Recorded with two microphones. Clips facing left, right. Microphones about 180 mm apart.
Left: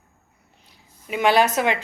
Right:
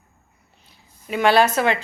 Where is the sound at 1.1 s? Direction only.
15° left (ahead or behind).